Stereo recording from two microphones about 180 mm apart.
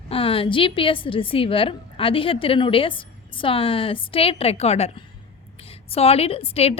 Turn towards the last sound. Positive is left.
turn(degrees=35)  # may be behind; listen again after turning